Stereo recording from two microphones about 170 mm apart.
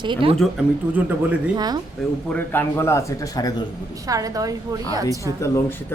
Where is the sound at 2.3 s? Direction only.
10° left (ahead or behind).